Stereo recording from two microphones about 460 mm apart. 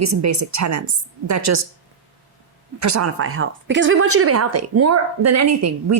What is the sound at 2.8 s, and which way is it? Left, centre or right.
A woman's voice, right.